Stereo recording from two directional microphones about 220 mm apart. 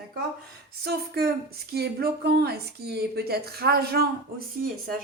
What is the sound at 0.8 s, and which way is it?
Speech, 45° right (ahead or behind).